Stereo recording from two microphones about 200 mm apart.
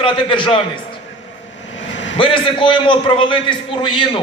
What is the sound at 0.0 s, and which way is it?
Speech, 25° left (ahead or behind).